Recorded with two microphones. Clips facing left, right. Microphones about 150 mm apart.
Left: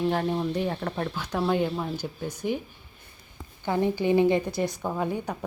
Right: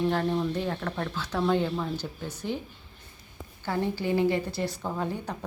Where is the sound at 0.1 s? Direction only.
15° left (ahead or behind).